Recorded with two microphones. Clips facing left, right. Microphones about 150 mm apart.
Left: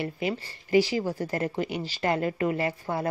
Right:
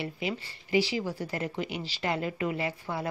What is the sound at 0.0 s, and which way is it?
A woman's voice, 45° left (ahead or behind).